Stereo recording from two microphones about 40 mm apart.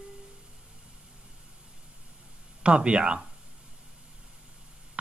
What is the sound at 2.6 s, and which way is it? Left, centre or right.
Speech, right.